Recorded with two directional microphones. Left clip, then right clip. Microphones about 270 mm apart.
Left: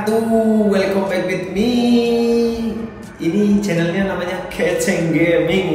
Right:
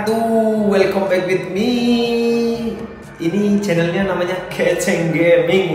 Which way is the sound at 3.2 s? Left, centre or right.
Centre.